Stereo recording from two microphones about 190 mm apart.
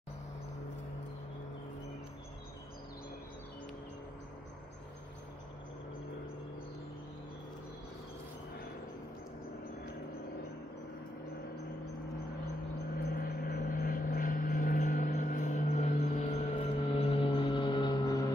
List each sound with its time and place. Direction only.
13.1 s vehicle: 50° left (ahead or behind); by 18.3 s 20° left (ahead or behind)